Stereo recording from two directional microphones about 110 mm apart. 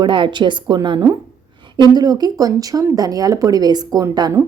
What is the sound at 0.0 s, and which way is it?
A woman's voice, 45° right (ahead or behind).